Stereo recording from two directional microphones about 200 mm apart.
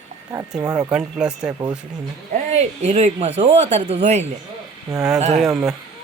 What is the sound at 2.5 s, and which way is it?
Speech, 35° right (ahead or behind).